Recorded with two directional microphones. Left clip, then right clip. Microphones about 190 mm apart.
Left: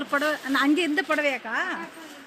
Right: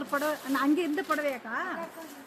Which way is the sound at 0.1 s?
15° left (ahead or behind).